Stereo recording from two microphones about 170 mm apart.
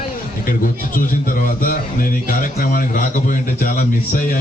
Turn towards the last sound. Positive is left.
turn(degrees=55)  # may be behind; listen again after turning